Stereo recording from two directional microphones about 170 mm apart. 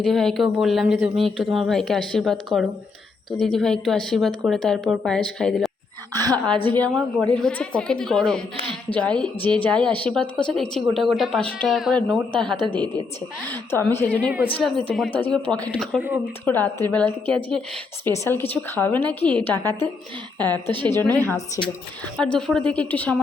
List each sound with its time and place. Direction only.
0.0 s speech: centre (ahead or behind)
6.1 s a woman's voice: 25° right (ahead or behind)
6.7 s speech: 10° left (ahead or behind)
12.6 s a woman's voice: 25° right (ahead or behind)
13.5 s speech: 15° left (ahead or behind)
16.0 s speech: 10° right (ahead or behind)
16.5 s speech: 15° left (ahead or behind)
20.8 s speech: 10° left (ahead or behind)
22.2 s speech: 5° left (ahead or behind)